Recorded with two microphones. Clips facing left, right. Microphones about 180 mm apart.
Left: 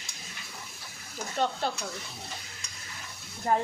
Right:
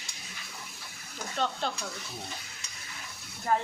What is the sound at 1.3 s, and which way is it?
Speech, 10° left (ahead or behind).